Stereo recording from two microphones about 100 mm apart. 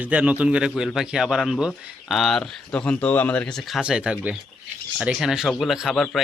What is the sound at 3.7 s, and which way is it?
Speech, 10° right (ahead or behind).